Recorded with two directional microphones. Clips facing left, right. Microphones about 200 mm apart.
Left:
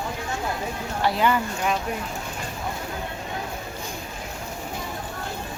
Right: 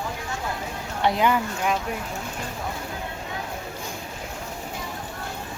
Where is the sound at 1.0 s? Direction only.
10° right (ahead or behind).